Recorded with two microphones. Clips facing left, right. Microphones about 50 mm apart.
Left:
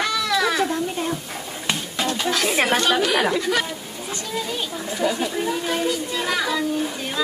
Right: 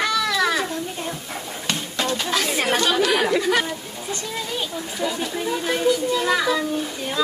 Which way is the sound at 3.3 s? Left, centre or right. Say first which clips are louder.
Right 2 dB; centre.